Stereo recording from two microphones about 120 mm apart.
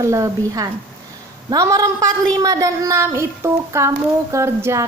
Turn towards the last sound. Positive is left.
turn(degrees=-25)  # may be behind; listen again after turning